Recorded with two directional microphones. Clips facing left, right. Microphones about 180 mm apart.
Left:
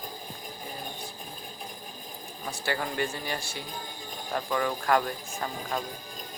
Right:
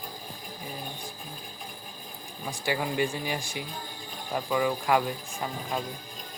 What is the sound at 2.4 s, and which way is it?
Speech, 15° right (ahead or behind).